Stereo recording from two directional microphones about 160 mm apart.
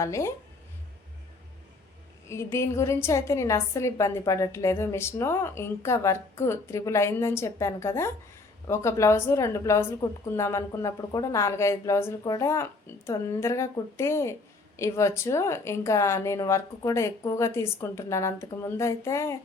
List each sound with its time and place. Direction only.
0.0 s speech: 20° left (ahead or behind)
2.3 s a woman's voice: 15° left (ahead or behind)